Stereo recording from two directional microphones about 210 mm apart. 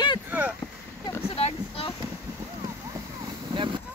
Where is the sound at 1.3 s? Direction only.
25° left (ahead or behind).